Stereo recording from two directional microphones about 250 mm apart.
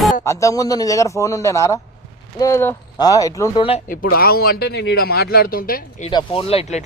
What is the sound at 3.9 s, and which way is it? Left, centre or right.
Speech, left.